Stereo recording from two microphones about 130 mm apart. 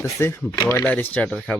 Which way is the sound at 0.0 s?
20° left (ahead or behind).